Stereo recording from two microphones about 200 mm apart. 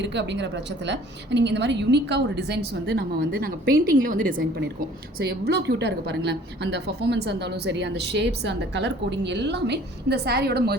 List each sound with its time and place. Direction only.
0.0 s a woman's voice: 60° right (ahead or behind); by 4.4 s 45° right (ahead or behind)
4.4 s a woman's voice: 55° right (ahead or behind)